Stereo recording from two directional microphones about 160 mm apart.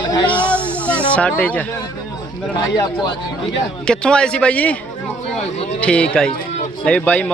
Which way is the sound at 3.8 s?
5° left (ahead or behind).